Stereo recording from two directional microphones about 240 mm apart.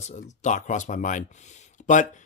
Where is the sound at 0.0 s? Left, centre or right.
Left.